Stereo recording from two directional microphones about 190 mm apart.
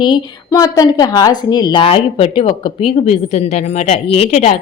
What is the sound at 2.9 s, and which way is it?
Speech, 35° left (ahead or behind).